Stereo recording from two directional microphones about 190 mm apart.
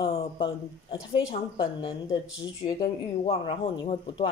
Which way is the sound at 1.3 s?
25° left (ahead or behind).